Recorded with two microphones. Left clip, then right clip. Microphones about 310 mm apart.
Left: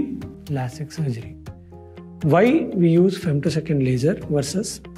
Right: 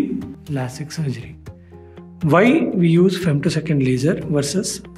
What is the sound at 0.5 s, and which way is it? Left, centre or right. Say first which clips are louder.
Speech: right 2 dB; left.